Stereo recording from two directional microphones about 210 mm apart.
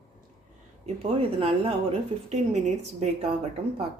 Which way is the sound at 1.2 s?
25° right (ahead or behind).